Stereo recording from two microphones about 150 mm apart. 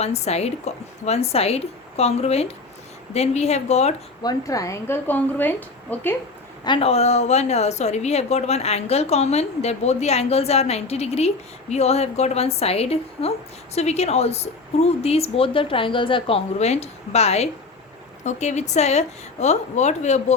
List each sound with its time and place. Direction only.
0.0 s a woman's voice: 45° left (ahead or behind)
4.2 s a woman's voice: 25° left (ahead or behind)
6.7 s a woman's voice: 40° left (ahead or behind)